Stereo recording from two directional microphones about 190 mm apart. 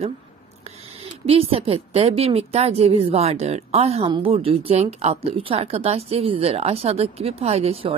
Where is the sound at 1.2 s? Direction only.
30° right (ahead or behind).